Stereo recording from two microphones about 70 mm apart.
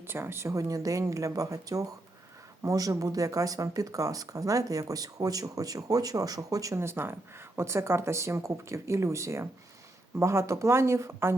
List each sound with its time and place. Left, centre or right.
0.1 s speech: right
0.5 s speech: right
6.7 s speech: right